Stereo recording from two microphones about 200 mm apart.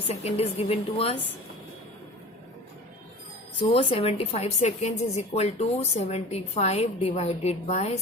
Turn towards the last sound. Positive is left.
turn(degrees=35)  # may be behind; listen again after turning